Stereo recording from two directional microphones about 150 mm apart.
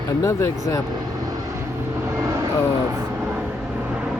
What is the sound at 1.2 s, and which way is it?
Vehicle, 25° right (ahead or behind).